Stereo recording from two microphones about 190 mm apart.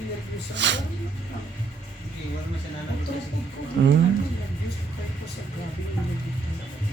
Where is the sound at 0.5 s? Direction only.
70° right (ahead or behind).